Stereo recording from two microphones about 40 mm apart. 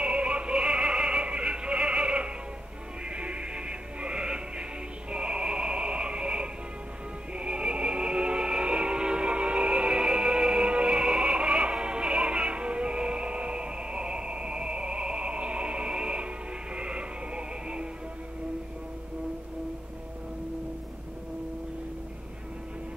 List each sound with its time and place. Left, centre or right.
0.0 s music: right